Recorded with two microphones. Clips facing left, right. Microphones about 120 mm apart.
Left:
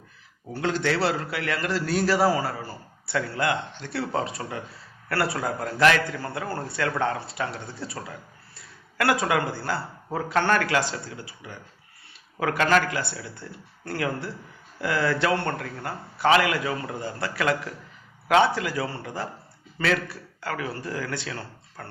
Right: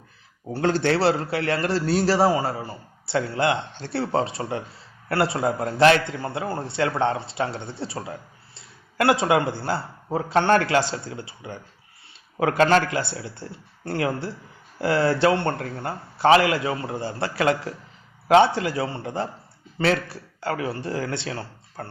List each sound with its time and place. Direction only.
0.5 s a man's voice: 35° right (ahead or behind)